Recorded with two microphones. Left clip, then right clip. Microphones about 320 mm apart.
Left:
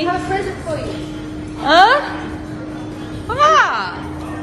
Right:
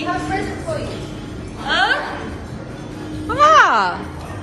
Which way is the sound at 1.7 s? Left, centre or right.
Centre.